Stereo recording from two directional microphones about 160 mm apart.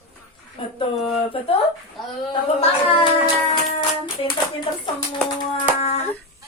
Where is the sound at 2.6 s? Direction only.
35° left (ahead or behind).